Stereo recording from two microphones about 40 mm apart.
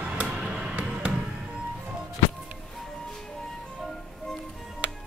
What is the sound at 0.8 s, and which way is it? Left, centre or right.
Music, right.